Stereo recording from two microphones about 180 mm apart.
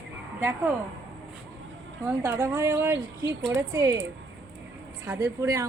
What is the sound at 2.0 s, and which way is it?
A woman's voice, 15° right (ahead or behind).